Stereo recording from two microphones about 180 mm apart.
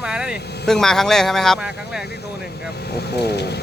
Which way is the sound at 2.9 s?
65° left (ahead or behind).